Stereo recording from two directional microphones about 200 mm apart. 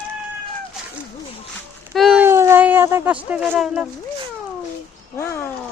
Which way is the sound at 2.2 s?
15° right (ahead or behind).